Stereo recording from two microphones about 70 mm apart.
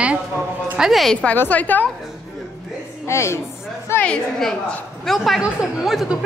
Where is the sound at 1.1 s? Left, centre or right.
Centre.